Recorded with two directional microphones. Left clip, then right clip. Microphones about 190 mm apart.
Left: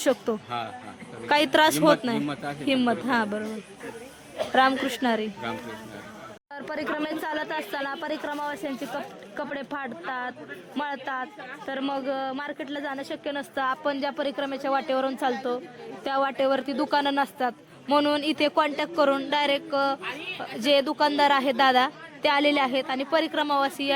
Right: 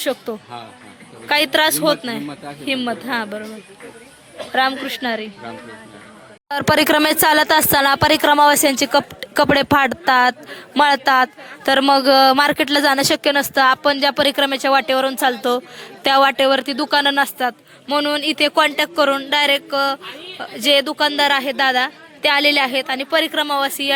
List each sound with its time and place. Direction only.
0.0 s a woman's voice: 10° left (ahead or behind)
4.5 s a woman's voice: 5° left (ahead or behind)
6.5 s speech: 30° right (ahead or behind); by 23.9 s 10° right (ahead or behind)